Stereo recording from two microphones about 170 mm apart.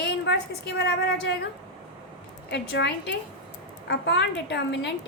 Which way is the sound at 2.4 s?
90° left.